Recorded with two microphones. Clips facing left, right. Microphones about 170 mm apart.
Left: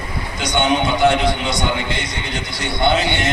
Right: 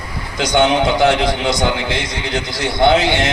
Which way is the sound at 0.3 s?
90° right.